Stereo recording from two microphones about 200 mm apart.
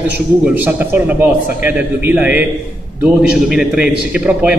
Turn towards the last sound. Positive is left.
turn(degrees=-5)  # may be behind; listen again after turning